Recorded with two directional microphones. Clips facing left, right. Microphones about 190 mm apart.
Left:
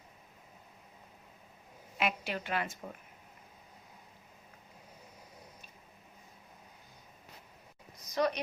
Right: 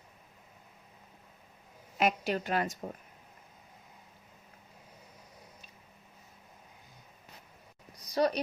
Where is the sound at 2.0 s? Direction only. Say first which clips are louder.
Right 5 dB; 40° right (ahead or behind).